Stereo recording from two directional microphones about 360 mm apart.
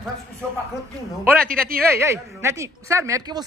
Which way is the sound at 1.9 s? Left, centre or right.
Centre.